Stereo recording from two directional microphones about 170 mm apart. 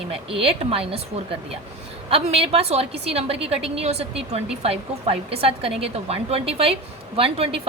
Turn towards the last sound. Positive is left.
turn(degrees=-35)  # may be behind; listen again after turning